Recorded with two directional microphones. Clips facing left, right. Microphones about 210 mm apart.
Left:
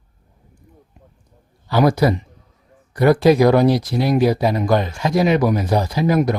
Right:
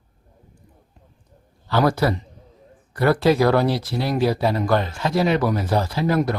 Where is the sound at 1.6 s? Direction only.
15° left (ahead or behind).